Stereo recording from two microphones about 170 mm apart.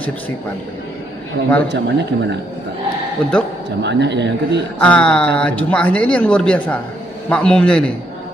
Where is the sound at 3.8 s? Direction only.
90° right.